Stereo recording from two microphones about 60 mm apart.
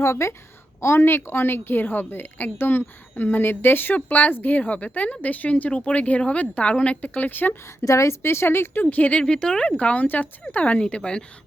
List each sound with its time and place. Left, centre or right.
0.0 s a woman's voice: left
7.9 s a woman's voice: left; by 11.2 s centre